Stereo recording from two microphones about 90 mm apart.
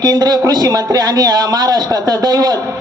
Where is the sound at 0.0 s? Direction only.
45° right (ahead or behind).